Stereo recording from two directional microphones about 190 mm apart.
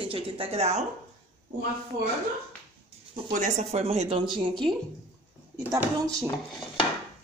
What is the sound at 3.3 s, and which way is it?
Chopping, 40° right (ahead or behind).